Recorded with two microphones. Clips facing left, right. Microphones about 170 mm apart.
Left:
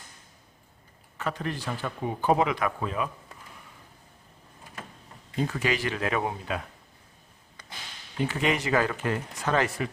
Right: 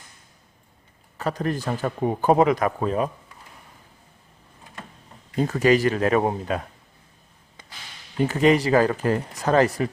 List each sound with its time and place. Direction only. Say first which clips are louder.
1.2 s speech: right 6 dB; 40° right (ahead or behind)
5.4 s speech: right 9 dB; 40° right (ahead or behind)
8.3 s speech: right 9 dB; 40° right (ahead or behind)